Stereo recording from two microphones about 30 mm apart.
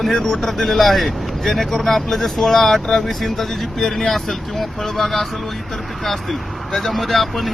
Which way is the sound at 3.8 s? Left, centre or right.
Centre.